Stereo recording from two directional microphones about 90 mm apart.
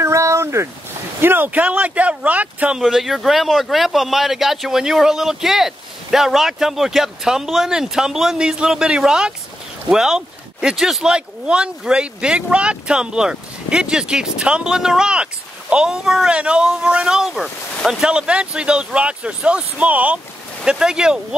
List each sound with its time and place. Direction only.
0.0 s a sound: 35° right (ahead or behind)
1.2 s speech: 20° right (ahead or behind)
2.8 s speech: 5° right (ahead or behind)